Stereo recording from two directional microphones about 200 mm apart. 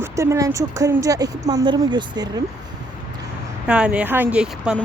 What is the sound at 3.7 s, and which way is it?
Speech, 5° right (ahead or behind).